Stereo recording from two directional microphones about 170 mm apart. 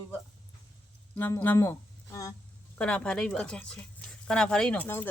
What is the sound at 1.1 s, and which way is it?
Speech, 10° left (ahead or behind).